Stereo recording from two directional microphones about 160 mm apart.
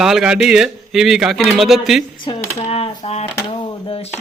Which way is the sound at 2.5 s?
40° left (ahead or behind).